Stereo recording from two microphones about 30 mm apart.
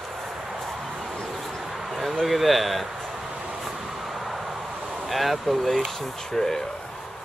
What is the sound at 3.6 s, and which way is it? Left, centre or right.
Vehicle, centre.